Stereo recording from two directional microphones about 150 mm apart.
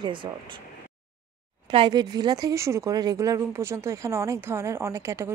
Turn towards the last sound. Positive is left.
turn(degrees=-20)  # may be behind; listen again after turning